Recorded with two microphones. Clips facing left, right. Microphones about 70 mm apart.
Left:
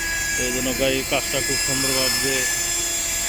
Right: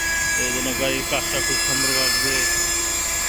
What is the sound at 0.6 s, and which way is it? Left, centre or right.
Speech, centre.